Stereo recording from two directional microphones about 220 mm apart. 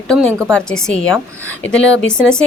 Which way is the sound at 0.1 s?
5° left (ahead or behind).